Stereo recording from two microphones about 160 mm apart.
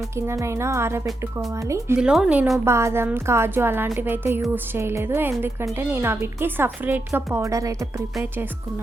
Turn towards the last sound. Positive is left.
turn(degrees=-20)  # may be behind; listen again after turning